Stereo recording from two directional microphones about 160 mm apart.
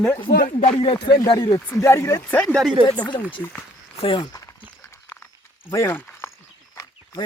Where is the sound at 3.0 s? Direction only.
30° left (ahead or behind).